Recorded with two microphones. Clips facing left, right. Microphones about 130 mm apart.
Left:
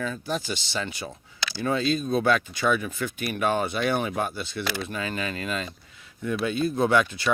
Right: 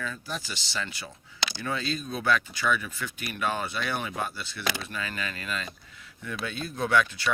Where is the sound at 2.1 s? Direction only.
25° left (ahead or behind).